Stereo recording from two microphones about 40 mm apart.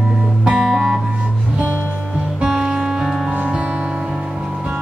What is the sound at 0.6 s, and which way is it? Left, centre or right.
Music, centre.